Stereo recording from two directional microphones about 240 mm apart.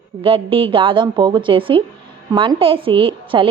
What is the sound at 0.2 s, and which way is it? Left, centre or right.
A woman's voice, right.